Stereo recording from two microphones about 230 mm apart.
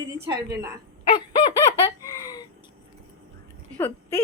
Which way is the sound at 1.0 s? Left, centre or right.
Left.